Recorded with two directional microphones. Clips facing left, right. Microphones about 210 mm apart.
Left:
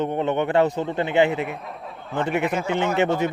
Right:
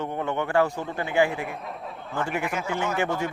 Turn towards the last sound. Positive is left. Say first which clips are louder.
# left 5 dB
turn(degrees=20)  # may be behind; listen again after turning